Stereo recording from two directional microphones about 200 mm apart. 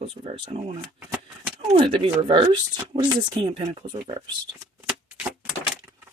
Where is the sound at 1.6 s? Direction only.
25° right (ahead or behind).